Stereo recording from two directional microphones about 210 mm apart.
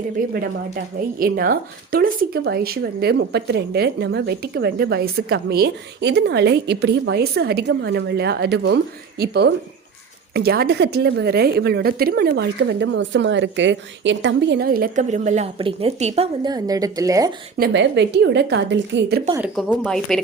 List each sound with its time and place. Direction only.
0.2 s speech: 40° right (ahead or behind); by 17.3 s 15° right (ahead or behind)
17.6 s a woman's voice: 55° right (ahead or behind)
19.4 s a woman's voice: centre (ahead or behind)